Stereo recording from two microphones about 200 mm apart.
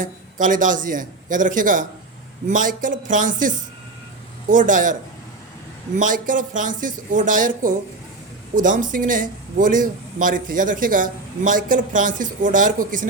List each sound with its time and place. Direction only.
0.0 s a man's voice: 40° right (ahead or behind)
6.0 s a man's voice: 40° right (ahead or behind)